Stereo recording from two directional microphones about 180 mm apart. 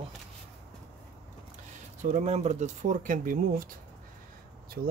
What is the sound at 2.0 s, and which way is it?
Speech, 40° right (ahead or behind).